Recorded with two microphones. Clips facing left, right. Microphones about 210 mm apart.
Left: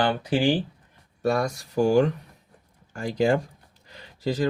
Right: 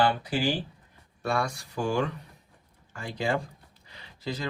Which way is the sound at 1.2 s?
40° left (ahead or behind).